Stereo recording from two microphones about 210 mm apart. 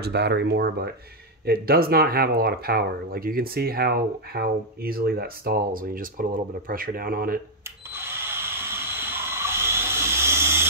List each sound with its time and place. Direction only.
0.0 s speech: 50° right (ahead or behind)
7.9 s drill: 10° right (ahead or behind)